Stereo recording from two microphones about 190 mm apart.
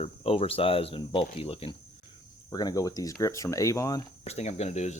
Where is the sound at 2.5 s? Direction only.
20° left (ahead or behind).